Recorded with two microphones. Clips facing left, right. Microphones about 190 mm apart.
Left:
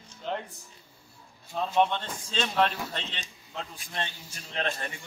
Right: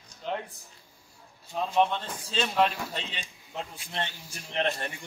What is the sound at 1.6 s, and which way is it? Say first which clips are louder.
Speech: even; 5° right (ahead or behind).